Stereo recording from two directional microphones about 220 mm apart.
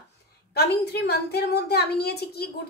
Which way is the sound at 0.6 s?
45° left (ahead or behind).